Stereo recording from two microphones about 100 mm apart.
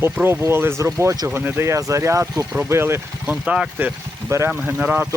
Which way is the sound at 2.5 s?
25° right (ahead or behind).